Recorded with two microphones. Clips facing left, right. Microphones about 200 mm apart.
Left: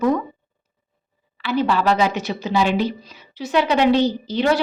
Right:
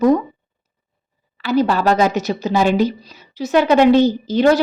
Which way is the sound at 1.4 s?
40° right (ahead or behind).